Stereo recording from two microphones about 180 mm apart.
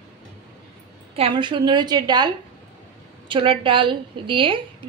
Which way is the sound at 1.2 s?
30° right (ahead or behind).